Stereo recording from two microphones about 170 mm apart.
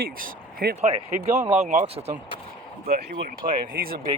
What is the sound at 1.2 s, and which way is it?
Speech, 15° right (ahead or behind).